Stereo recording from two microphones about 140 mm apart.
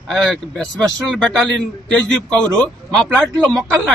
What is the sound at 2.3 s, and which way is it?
Speech, 25° right (ahead or behind).